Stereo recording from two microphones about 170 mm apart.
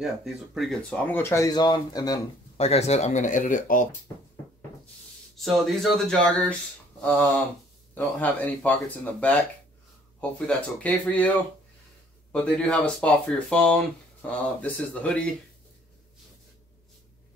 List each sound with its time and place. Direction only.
0.0 s speech: centre (ahead or behind); by 2.2 s 20° left (ahead or behind)
2.5 s speech: 35° left (ahead or behind)
5.4 s speech: centre (ahead or behind)
10.4 s speech: 5° left (ahead or behind)
12.3 s speech: 5° left (ahead or behind)